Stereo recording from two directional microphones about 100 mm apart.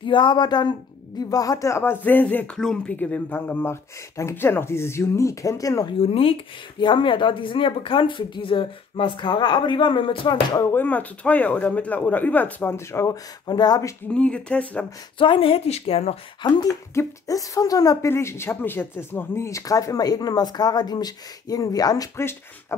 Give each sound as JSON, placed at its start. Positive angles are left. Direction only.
{"t": 0.0, "sound": "speech", "side_deg": 50}
{"t": 5.9, "sound": "speech", "side_deg": 70}
{"t": 6.8, "sound": "speech", "side_deg": 55}
{"t": 10.7, "sound": "speech", "side_deg": 20}
{"t": 12.7, "sound": "speech", "side_deg": 30}
{"t": 14.1, "sound": "speech", "side_deg": 10}
{"t": 15.1, "sound": "speech", "side_deg": 60}
{"t": 16.4, "sound": "speech", "side_deg": 45}
{"t": 16.9, "sound": "speech", "side_deg": 30}
{"t": 18.1, "sound": "speech", "side_deg": 25}
{"t": 22.1, "sound": "speech", "side_deg": 25}